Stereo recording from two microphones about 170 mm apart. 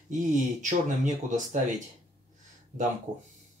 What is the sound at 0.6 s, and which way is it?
Speech, 45° right (ahead or behind).